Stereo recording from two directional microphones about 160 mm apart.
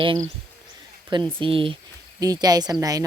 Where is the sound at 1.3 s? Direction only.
30° right (ahead or behind).